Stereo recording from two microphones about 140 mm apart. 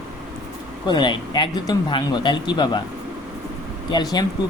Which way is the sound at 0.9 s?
35° left (ahead or behind).